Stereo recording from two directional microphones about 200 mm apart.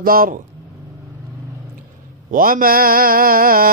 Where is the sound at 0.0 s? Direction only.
45° right (ahead or behind).